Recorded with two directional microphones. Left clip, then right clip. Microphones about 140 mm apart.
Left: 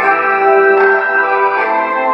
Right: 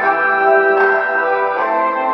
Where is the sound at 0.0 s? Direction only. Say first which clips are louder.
Left 2 dB; 20° right (ahead or behind).